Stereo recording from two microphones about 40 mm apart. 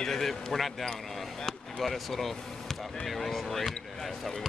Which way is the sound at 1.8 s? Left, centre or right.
Centre.